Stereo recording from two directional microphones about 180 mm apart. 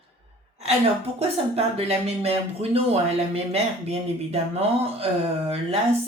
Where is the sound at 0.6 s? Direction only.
35° right (ahead or behind).